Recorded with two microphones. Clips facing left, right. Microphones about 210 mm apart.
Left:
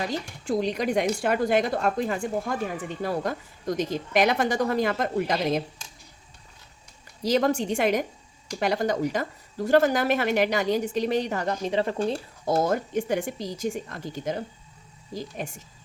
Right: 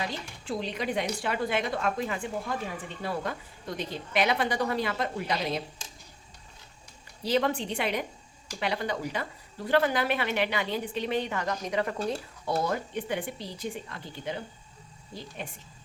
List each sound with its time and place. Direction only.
0.0 s speech: 40° left (ahead or behind)
7.2 s speech: 40° left (ahead or behind)
12.5 s speech: 45° left (ahead or behind)